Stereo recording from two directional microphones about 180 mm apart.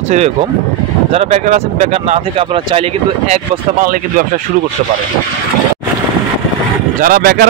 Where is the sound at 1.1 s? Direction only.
40° right (ahead or behind).